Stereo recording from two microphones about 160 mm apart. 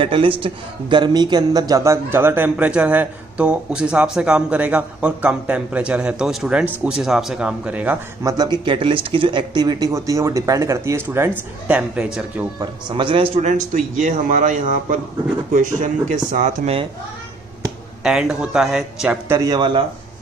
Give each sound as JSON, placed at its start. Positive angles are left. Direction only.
{"t": 0.0, "sound": "speech", "side_deg": -35}
{"t": 12.5, "sound": "speech", "side_deg": -30}
{"t": 13.4, "sound": "speech", "side_deg": -50}
{"t": 18.0, "sound": "speech", "side_deg": -5}
{"t": 19.2, "sound": "speech", "side_deg": -20}